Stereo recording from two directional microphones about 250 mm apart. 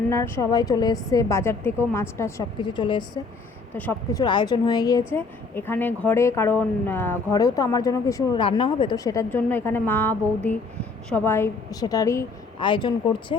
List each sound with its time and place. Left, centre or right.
0.1 s a woman's voice: centre
3.8 s a woman's voice: centre
4.2 s a woman's voice: centre